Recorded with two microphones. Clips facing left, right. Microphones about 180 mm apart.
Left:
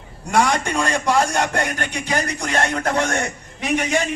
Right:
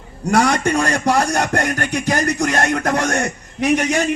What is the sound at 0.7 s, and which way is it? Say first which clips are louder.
Speech: right 3 dB; 65° right (ahead or behind).